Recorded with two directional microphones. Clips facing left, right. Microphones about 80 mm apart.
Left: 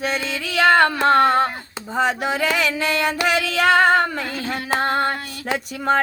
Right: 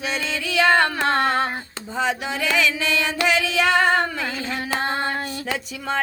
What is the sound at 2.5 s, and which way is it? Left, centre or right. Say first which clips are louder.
Music: left 1 dB; left.